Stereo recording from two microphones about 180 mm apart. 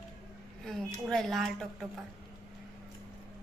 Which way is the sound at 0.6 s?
Centre (ahead or behind).